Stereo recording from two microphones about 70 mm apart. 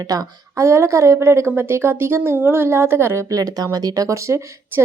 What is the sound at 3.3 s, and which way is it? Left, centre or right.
Speech, right.